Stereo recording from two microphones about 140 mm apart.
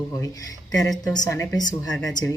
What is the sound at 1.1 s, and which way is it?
Speech, 25° left (ahead or behind).